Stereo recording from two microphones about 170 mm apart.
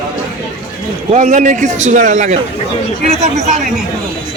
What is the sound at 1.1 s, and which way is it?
A man's voice, 45° right (ahead or behind).